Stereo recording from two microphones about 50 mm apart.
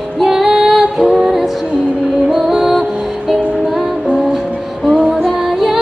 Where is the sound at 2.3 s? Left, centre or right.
Centre.